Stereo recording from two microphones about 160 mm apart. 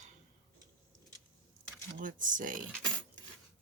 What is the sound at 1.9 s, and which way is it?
Speech, 55° right (ahead or behind).